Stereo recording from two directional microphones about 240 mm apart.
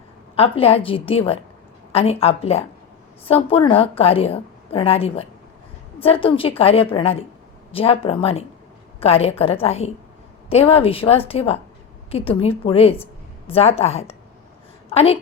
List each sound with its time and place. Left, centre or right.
0.3 s a woman's voice: left